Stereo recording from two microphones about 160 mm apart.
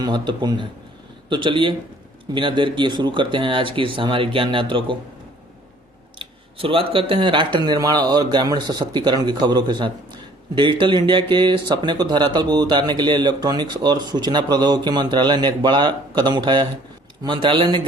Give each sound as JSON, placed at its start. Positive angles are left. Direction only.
{"t": 0.0, "sound": "speech", "side_deg": -25}
{"t": 6.1, "sound": "speech", "side_deg": -35}